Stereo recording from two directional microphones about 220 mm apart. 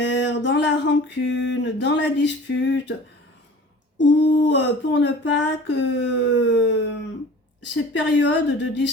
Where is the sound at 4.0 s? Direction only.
55° left (ahead or behind).